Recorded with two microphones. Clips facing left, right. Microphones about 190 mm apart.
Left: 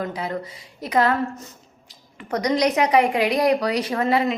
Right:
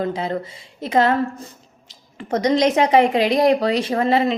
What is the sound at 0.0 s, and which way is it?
A woman's voice, 25° right (ahead or behind).